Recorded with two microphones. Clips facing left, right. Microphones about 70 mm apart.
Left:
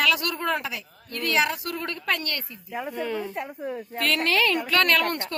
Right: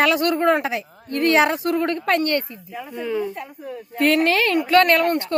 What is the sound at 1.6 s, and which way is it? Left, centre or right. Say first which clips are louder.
Speech: right 8 dB; right.